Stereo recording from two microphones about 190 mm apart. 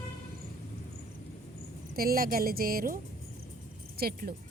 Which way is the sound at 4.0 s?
55° right (ahead or behind).